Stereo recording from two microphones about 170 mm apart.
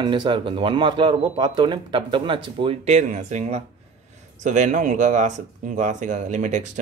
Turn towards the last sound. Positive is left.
turn(degrees=-45)  # may be behind; listen again after turning